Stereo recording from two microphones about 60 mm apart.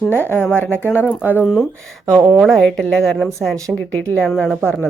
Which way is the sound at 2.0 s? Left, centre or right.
Right.